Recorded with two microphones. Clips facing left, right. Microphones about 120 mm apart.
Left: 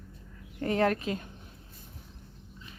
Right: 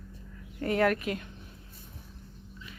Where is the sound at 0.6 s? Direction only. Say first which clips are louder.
Even; 30° left (ahead or behind).